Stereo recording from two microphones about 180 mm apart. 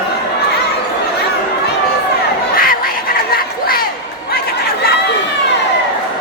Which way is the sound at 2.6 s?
55° left (ahead or behind).